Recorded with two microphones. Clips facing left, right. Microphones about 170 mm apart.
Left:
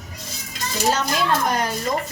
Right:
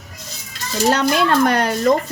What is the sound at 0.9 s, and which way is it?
Speech, 65° right (ahead or behind).